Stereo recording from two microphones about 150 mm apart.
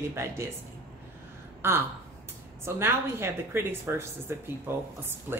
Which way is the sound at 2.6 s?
15° right (ahead or behind).